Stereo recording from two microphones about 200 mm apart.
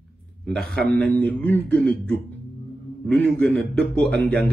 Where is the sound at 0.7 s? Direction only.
5° left (ahead or behind).